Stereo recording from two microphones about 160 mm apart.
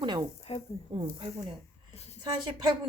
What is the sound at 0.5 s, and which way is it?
Speech, 35° left (ahead or behind).